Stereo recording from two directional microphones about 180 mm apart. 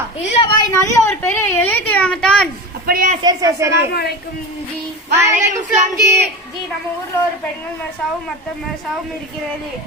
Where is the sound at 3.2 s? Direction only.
15° right (ahead or behind).